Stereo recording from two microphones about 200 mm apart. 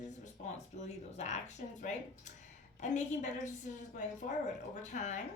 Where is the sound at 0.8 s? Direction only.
35° left (ahead or behind).